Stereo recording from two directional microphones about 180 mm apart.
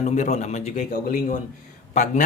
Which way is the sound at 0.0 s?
40° left (ahead or behind).